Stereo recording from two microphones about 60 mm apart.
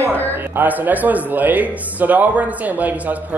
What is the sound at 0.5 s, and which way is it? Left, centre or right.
A man's voice, right.